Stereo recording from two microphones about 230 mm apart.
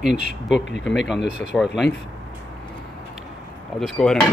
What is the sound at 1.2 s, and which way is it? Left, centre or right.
Speech, left.